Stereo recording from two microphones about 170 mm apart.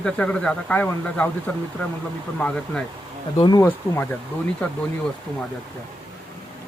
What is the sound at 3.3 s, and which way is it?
Speech, 30° left (ahead or behind).